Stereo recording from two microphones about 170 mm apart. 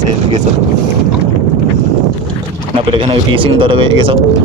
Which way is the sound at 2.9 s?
30° right (ahead or behind).